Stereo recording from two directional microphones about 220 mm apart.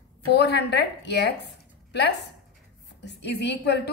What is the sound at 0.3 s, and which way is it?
A woman's voice, 50° left (ahead or behind).